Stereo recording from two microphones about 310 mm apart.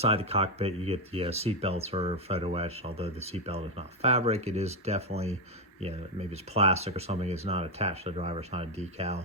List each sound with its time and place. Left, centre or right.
0.0 s speech: centre